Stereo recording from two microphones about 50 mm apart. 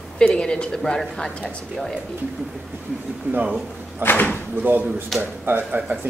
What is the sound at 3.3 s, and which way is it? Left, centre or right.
Speech, right.